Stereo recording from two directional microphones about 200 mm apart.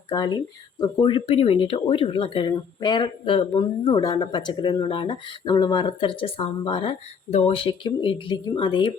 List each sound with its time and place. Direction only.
0.1 s speech: 20° left (ahead or behind)